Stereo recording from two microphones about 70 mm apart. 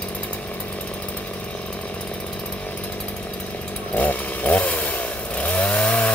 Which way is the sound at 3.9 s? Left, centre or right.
Left.